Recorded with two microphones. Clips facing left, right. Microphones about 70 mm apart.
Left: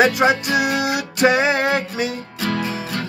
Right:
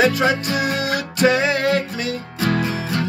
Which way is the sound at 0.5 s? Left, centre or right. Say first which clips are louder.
Left 2 dB; centre.